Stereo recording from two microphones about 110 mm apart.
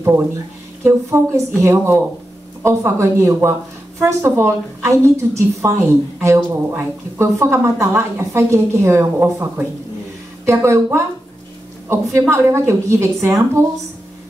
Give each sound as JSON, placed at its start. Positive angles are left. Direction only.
{"t": 0.8, "sound": "a woman's voice", "side_deg": -25}